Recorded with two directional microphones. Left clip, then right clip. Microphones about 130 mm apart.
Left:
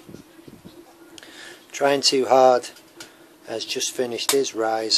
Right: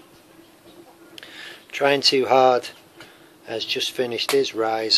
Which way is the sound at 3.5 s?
20° left (ahead or behind).